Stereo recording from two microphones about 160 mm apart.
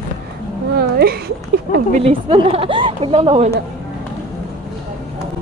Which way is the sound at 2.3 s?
35° right (ahead or behind).